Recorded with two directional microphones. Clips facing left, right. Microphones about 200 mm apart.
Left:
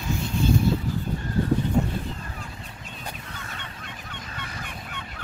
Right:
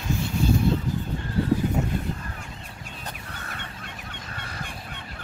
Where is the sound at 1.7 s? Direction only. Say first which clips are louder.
Left 3 dB; 5° right (ahead or behind).